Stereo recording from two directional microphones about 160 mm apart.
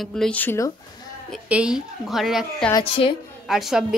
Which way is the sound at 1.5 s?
5° right (ahead or behind).